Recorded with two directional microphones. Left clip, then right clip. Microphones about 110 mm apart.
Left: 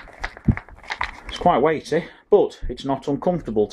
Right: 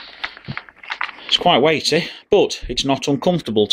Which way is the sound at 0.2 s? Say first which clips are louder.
Left 1 dB; 45° left (ahead or behind).